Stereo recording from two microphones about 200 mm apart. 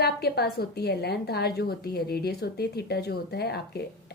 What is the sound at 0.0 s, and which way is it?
A woman's voice, 55° left (ahead or behind).